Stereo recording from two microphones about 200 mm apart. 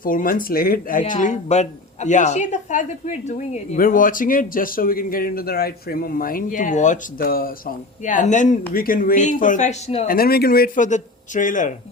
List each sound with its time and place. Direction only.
0.0 s speech: 45° left (ahead or behind)
10.2 s speech: 50° left (ahead or behind)